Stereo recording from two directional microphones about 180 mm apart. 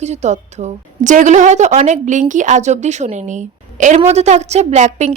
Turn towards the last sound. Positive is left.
turn(degrees=-40)  # may be behind; listen again after turning